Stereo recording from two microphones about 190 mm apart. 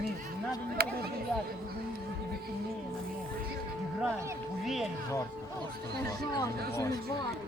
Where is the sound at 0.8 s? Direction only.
55° right (ahead or behind).